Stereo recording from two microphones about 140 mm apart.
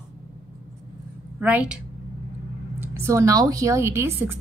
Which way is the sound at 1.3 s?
10° right (ahead or behind).